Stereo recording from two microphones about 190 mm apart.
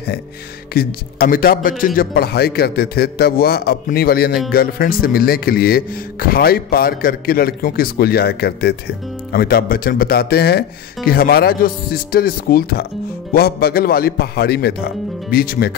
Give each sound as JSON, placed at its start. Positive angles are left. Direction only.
{"t": 0.7, "sound": "a man's voice", "side_deg": 50}